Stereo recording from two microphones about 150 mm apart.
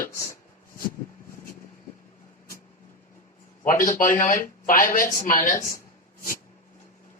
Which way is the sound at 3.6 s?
60° left (ahead or behind).